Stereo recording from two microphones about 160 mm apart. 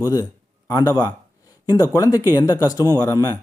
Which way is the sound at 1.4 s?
20° left (ahead or behind).